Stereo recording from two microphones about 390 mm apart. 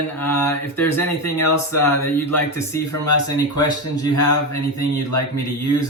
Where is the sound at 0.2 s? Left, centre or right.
Centre.